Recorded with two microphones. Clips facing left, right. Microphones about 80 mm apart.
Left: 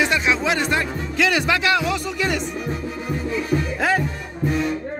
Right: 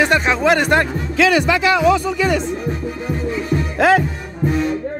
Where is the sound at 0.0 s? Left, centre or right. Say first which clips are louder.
Right 5 dB; right.